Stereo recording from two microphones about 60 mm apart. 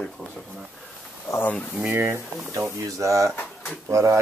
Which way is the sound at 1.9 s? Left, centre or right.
Right.